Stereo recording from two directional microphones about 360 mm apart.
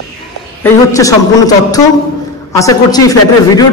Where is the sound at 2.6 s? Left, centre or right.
Centre.